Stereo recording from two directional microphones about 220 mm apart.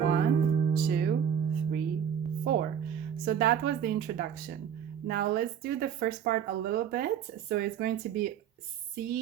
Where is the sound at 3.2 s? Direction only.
45° right (ahead or behind).